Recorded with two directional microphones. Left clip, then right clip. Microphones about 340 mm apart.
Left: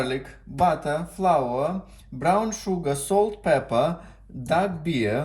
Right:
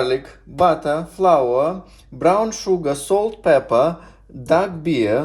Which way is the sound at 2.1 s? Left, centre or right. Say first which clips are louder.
Right 6 dB; centre.